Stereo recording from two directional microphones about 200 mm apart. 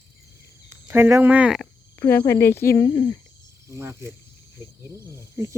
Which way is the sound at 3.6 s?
15° right (ahead or behind).